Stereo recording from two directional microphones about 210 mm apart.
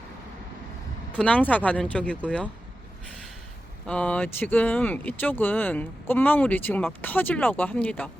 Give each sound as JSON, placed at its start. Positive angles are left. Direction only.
{"t": 1.1, "sound": "speech", "side_deg": 5}
{"t": 3.8, "sound": "speech", "side_deg": 5}